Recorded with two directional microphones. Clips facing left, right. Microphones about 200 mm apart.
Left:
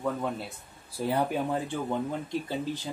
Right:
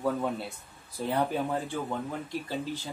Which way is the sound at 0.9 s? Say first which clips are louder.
Left 1 dB; 10° left (ahead or behind).